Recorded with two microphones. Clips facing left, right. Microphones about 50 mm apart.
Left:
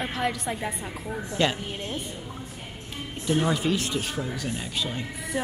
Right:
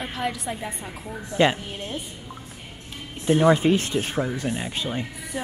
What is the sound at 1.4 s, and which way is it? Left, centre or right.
Speech, right.